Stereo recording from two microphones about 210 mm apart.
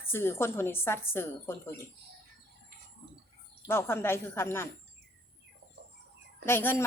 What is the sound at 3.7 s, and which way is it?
A woman's voice, 10° left (ahead or behind).